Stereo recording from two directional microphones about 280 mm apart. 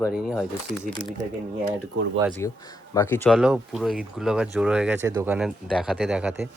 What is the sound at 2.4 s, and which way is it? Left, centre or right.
Speech, centre.